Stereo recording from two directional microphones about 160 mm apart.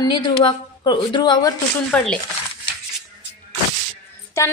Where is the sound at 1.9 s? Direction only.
10° left (ahead or behind).